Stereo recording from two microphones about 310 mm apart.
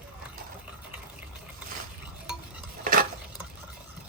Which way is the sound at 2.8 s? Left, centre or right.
Right.